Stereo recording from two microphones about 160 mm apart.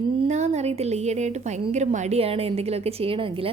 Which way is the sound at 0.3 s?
45° right (ahead or behind).